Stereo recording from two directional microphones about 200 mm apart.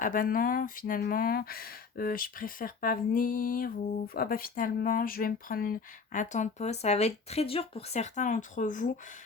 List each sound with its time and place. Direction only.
0.0 s speech: 45° left (ahead or behind)